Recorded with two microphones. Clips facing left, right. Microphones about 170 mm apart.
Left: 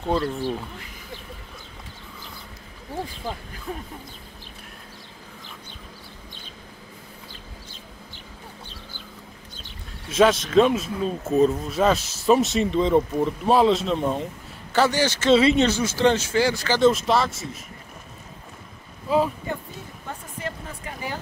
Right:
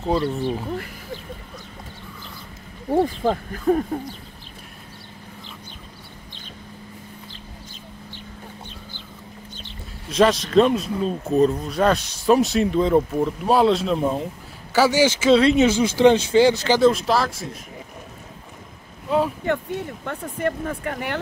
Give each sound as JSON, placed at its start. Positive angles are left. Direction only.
{"t": 0.0, "sound": "speech", "side_deg": -5}
{"t": 0.7, "sound": "speech", "side_deg": -55}
{"t": 3.3, "sound": "speech", "side_deg": -50}
{"t": 10.0, "sound": "speech", "side_deg": 0}
{"t": 15.7, "sound": "speech", "side_deg": -15}
{"t": 16.8, "sound": "speech", "side_deg": 0}
{"t": 19.0, "sound": "speech", "side_deg": 0}
{"t": 19.4, "sound": "speech", "side_deg": -70}